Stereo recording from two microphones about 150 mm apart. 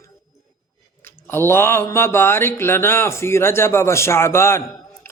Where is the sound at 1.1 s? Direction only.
15° left (ahead or behind).